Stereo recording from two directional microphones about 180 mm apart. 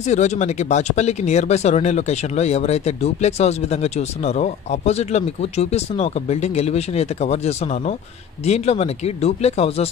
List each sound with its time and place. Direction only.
0.0 s speech: 40° left (ahead or behind)